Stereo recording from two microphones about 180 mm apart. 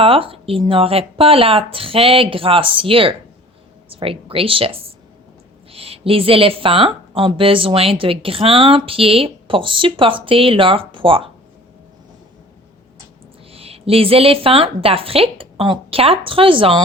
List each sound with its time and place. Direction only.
0.0 s a woman's voice: 30° right (ahead or behind)
13.5 s a woman's voice: 35° right (ahead or behind)